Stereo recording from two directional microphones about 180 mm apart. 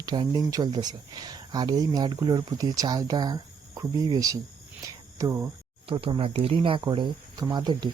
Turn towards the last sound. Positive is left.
turn(degrees=-25)  # may be behind; listen again after turning